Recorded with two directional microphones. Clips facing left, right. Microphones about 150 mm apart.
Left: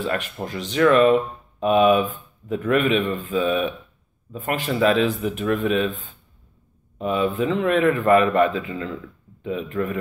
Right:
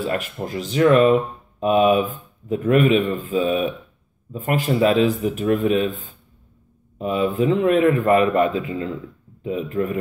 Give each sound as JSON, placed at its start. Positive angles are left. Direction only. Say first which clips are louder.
{"t": 0.0, "sound": "a man's voice", "louder": "right 1 dB", "side_deg": -35}